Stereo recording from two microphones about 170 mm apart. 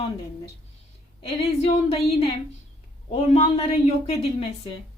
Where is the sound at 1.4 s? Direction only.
35° left (ahead or behind).